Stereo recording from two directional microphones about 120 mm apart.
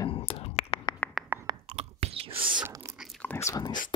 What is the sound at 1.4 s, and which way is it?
Chewing, 55° right (ahead or behind).